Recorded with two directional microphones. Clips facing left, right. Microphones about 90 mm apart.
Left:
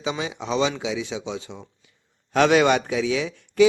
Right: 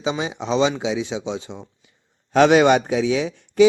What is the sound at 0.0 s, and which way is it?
A man's voice, 25° right (ahead or behind).